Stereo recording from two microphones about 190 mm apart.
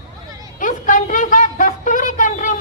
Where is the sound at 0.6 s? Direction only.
45° left (ahead or behind).